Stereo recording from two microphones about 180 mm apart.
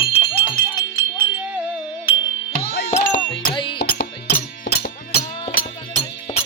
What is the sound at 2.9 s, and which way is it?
Music, 35° left (ahead or behind).